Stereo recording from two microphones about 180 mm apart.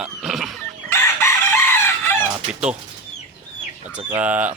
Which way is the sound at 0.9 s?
15° left (ahead or behind).